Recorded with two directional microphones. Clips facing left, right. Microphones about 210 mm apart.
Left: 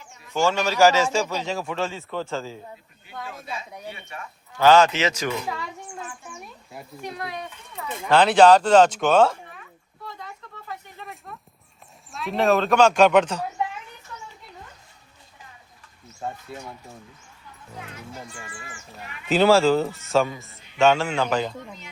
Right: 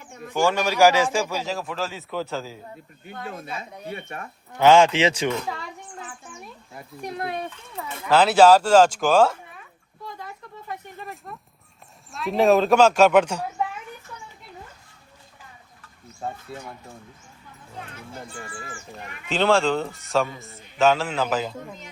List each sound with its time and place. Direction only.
0.0 s bird: 55° right (ahead or behind)
0.3 s a man's voice: 15° right (ahead or behind)
1.5 s speech: centre (ahead or behind)
3.2 s speech: 55° right (ahead or behind)
4.5 s speech: 20° right (ahead or behind)
8.1 s speech: 5° right (ahead or behind)
11.0 s speech: centre (ahead or behind)
16.5 s speech: centre (ahead or behind)
18.3 s speech: 35° right (ahead or behind)
19.3 s speech: 5° left (ahead or behind)